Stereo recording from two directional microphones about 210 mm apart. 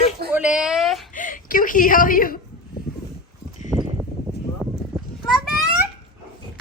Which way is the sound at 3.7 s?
10° left (ahead or behind).